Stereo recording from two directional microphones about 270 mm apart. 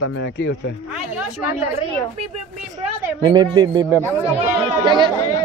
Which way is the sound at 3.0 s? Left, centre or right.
Centre.